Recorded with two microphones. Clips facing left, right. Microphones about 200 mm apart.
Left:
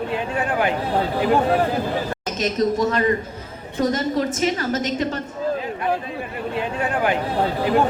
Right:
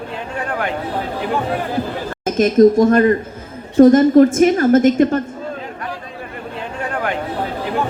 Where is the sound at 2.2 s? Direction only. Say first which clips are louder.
Right 12 dB; 50° right (ahead or behind).